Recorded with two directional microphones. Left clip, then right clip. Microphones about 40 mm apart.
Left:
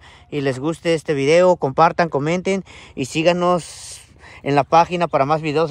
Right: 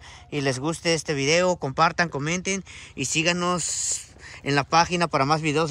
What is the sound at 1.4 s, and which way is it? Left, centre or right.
Speech, left.